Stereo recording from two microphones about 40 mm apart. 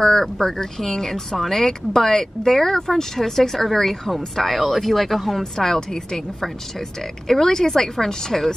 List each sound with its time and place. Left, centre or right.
0.0 s speech: centre
5.4 s speech: centre